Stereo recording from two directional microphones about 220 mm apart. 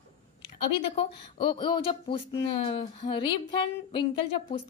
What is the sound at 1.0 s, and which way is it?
Speech, 20° left (ahead or behind).